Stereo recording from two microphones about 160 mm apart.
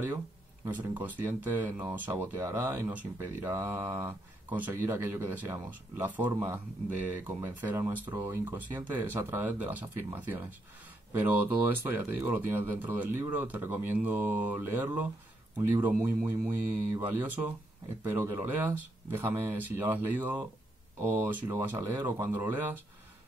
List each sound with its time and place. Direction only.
0.7 s speech: 10° right (ahead or behind)